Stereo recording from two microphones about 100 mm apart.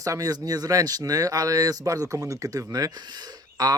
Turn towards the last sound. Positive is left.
turn(degrees=-40)  # may be behind; listen again after turning